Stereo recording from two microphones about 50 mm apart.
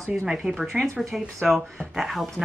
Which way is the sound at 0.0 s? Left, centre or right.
Centre.